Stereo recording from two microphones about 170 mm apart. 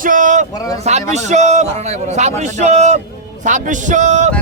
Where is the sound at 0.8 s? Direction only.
40° right (ahead or behind).